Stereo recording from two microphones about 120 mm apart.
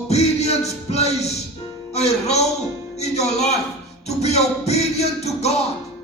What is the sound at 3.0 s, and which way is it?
Speech, 65° left (ahead or behind).